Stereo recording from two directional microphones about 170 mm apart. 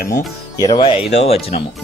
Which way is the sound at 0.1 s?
20° left (ahead or behind).